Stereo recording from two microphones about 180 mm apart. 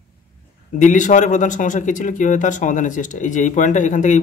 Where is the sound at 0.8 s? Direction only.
45° left (ahead or behind).